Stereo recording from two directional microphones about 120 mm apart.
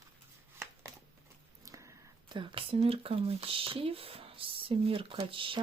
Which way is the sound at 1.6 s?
25° right (ahead or behind).